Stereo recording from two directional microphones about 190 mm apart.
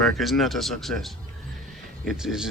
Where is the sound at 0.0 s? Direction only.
Centre (ahead or behind).